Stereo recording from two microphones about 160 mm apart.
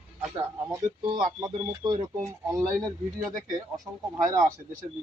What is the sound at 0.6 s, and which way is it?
Speech, 25° right (ahead or behind).